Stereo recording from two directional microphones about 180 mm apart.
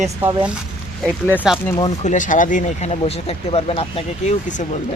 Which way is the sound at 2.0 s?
45° left (ahead or behind).